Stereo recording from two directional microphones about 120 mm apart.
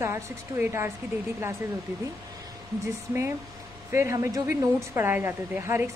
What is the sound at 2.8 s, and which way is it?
A woman's voice, 25° right (ahead or behind).